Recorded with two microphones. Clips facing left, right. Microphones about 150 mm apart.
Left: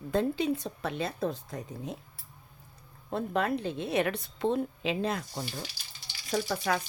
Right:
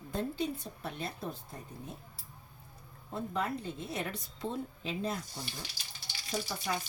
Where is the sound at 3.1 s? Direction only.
75° left (ahead or behind).